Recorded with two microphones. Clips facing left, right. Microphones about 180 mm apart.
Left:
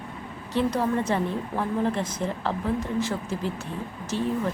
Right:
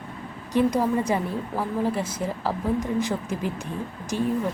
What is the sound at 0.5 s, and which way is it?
Speech, 10° right (ahead or behind).